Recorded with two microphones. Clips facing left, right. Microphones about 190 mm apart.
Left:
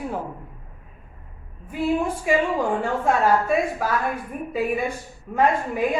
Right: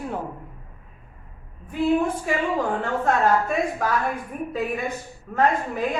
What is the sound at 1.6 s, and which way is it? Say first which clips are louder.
Speech: right 2 dB; 10° left (ahead or behind).